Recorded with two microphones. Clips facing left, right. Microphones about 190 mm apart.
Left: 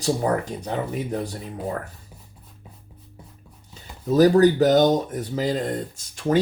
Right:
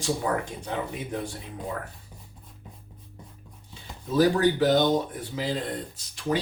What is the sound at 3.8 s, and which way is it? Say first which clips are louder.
Speech: left 5 dB; 40° left (ahead or behind).